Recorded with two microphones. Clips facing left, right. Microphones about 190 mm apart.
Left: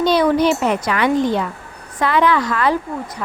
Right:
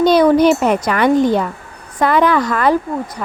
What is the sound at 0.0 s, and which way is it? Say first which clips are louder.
Speech: right 4 dB; 45° right (ahead or behind).